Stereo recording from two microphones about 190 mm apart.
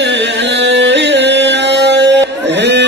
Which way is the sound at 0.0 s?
65° right (ahead or behind).